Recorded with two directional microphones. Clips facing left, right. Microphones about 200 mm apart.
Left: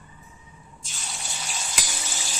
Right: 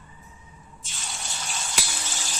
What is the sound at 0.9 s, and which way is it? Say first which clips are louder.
Water: even; centre (ahead or behind).